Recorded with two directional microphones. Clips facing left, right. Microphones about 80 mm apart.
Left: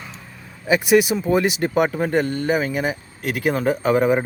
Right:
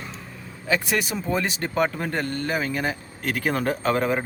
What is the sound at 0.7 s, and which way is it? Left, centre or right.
Speech, centre.